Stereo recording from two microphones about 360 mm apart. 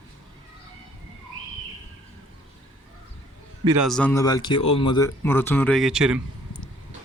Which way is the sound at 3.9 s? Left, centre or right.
Centre.